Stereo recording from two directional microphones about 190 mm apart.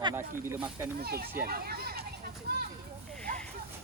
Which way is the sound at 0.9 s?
55° right (ahead or behind).